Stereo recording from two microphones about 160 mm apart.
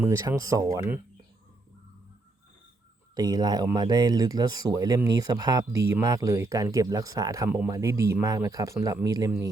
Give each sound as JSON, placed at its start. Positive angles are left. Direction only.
{"t": 0.0, "sound": "speech", "side_deg": -20}
{"t": 3.2, "sound": "speech", "side_deg": -25}